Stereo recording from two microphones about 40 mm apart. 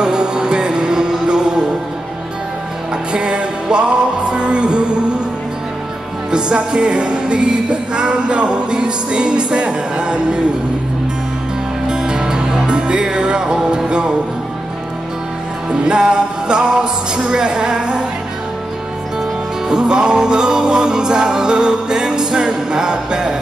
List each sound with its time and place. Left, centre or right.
0.0 s music: centre
3.1 s music: right
6.3 s music: right
11.9 s music: centre
15.7 s music: right
19.7 s music: right